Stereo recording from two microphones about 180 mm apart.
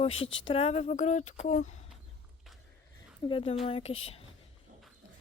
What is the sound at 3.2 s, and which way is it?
Speech, 30° left (ahead or behind).